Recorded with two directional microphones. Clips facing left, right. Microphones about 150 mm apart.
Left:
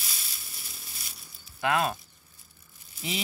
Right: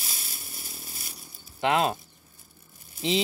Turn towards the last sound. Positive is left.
turn(degrees=-50)  # may be behind; listen again after turning